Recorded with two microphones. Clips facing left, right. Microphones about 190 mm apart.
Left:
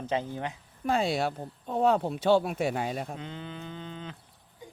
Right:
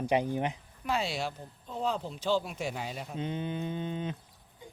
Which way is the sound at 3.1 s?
20° right (ahead or behind).